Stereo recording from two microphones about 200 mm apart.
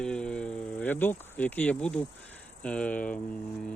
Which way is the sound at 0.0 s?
5° left (ahead or behind).